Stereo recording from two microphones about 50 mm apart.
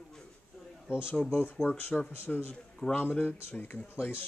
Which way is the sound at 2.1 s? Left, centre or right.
Left.